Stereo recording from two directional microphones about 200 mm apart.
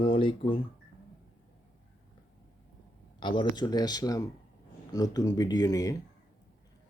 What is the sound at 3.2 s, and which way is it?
Speech, 25° left (ahead or behind).